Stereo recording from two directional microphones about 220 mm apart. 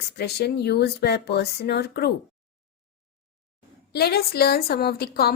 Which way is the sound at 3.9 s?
45° left (ahead or behind).